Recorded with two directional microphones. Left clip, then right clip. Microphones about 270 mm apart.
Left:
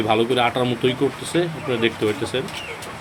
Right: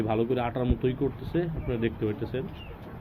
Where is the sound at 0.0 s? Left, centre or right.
Centre.